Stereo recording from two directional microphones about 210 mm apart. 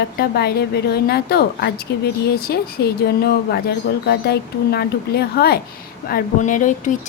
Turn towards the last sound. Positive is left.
turn(degrees=35)  # may be behind; listen again after turning